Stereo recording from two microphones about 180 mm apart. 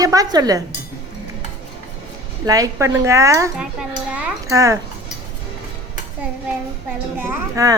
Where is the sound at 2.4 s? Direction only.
20° right (ahead or behind).